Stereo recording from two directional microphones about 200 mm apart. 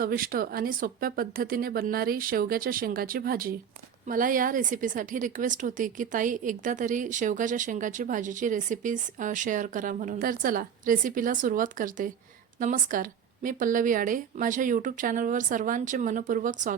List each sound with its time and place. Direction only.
0.0 s a woman's voice: 45° right (ahead or behind)